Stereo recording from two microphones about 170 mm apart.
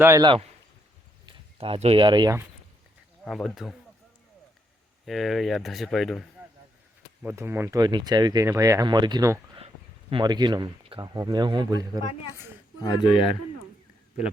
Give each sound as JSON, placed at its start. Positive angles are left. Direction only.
{"t": 0.0, "sound": "a man's voice", "side_deg": -15}
{"t": 1.3, "sound": "speech", "side_deg": -35}
{"t": 3.2, "sound": "speech", "side_deg": 0}
{"t": 5.0, "sound": "speech", "side_deg": 0}
{"t": 7.2, "sound": "speech", "side_deg": -15}
{"t": 9.6, "sound": "speech", "side_deg": -35}
{"t": 12.8, "sound": "speech", "side_deg": 25}